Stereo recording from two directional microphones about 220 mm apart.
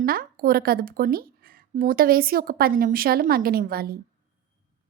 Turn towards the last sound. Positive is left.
turn(degrees=-45)  # may be behind; listen again after turning